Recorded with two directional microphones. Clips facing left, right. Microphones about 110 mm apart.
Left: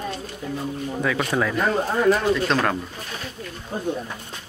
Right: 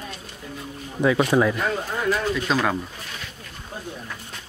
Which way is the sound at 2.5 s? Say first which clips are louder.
Left 1 dB; 5° right (ahead or behind).